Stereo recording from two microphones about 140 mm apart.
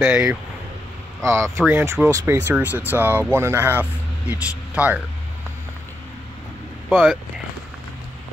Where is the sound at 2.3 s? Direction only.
10° right (ahead or behind).